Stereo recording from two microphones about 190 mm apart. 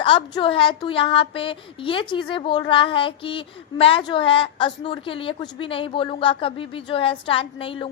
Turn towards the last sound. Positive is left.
turn(degrees=30)  # may be behind; listen again after turning